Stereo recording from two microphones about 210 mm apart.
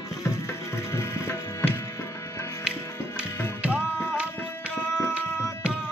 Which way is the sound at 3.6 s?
5° right (ahead or behind).